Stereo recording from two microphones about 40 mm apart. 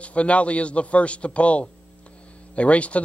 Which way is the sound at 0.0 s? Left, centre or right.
Left.